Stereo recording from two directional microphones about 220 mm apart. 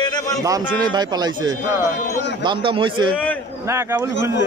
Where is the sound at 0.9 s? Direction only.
20° right (ahead or behind).